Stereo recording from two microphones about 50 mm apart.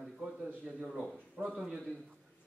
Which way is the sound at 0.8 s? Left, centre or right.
Right.